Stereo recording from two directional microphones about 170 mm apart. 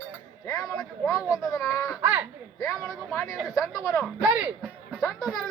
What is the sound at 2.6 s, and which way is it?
Speech, 20° left (ahead or behind).